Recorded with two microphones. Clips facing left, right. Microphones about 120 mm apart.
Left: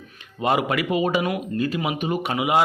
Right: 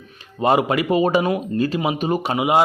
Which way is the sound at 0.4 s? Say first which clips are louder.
Right 4 dB; 30° right (ahead or behind).